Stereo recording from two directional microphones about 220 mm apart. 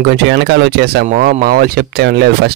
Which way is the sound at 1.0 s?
35° right (ahead or behind).